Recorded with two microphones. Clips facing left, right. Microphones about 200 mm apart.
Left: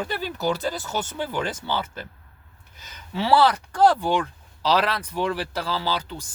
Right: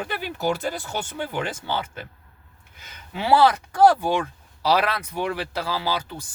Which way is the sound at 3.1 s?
15° right (ahead or behind).